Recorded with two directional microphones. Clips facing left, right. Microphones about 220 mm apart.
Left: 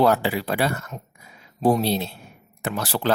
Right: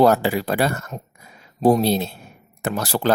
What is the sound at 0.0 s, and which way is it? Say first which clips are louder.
Speech: right 3 dB; 45° right (ahead or behind).